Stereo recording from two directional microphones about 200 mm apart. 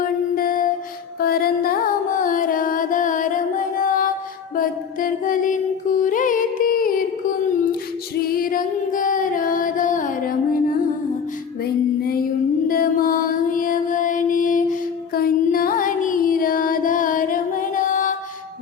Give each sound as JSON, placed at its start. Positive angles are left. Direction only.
{"t": 0.0, "sound": "music", "side_deg": 45}
{"t": 12.6, "sound": "mantra", "side_deg": 45}